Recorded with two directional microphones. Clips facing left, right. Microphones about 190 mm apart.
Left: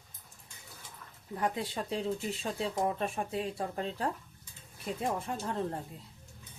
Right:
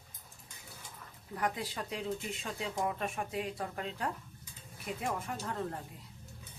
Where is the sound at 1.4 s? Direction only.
25° left (ahead or behind).